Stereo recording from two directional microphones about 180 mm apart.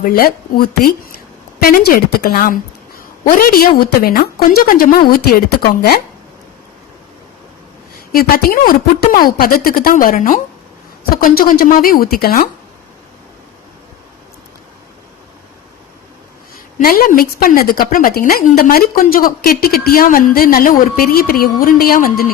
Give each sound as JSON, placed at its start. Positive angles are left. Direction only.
{"t": 0.0, "sound": "a woman's voice", "side_deg": 55}
{"t": 8.1, "sound": "a woman's voice", "side_deg": 55}
{"t": 16.7, "sound": "a woman's voice", "side_deg": 55}